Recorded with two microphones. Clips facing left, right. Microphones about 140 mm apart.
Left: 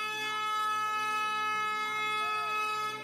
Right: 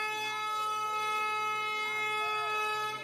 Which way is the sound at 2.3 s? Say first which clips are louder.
Right 1 dB; 15° right (ahead or behind).